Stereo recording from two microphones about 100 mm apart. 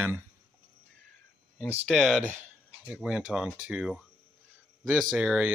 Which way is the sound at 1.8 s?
Centre (ahead or behind).